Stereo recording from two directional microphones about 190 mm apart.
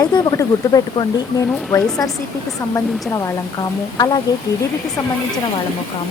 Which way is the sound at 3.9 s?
20° left (ahead or behind).